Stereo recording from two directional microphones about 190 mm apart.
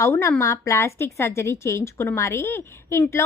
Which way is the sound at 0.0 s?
15° left (ahead or behind).